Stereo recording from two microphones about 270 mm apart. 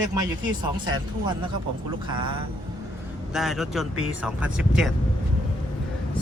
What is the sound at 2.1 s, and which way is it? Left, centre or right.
Speech, centre.